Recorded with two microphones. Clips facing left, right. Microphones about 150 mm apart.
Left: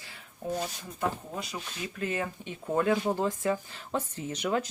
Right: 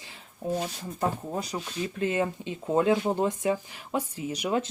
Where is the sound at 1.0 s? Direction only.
40° right (ahead or behind).